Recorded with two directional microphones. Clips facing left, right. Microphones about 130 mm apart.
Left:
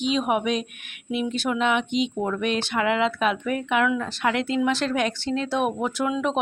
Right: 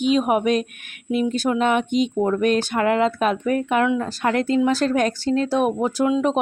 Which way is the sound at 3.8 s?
30° right (ahead or behind).